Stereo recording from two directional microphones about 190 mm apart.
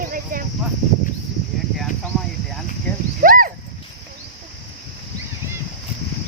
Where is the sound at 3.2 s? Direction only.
45° right (ahead or behind).